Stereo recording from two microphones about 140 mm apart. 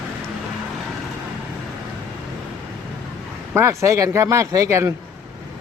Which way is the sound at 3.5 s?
20° right (ahead or behind).